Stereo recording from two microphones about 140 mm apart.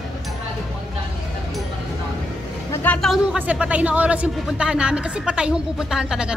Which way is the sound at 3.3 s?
10° right (ahead or behind).